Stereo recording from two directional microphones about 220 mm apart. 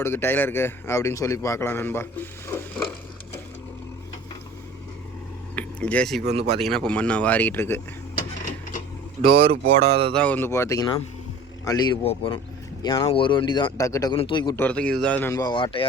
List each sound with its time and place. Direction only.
0.0 s a man's voice: 10° left (ahead or behind)
2.5 s a sound: 10° left (ahead or behind)
5.5 s speech: 5° left (ahead or behind)
9.3 s speech: 25° right (ahead or behind)
10.1 s a man's voice: 5° left (ahead or behind); by 15.9 s 25° left (ahead or behind)